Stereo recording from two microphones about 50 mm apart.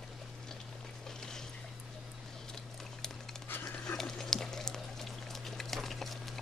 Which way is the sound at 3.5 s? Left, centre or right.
Left.